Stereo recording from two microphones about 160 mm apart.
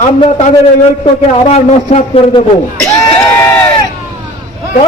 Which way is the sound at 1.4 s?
45° left (ahead or behind).